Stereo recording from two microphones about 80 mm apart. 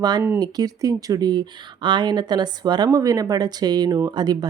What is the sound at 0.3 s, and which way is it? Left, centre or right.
Speech, right.